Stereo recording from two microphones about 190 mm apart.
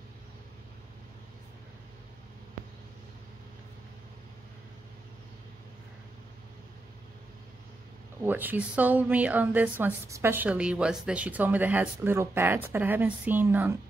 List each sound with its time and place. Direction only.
8.2 s a woman's voice: 10° right (ahead or behind)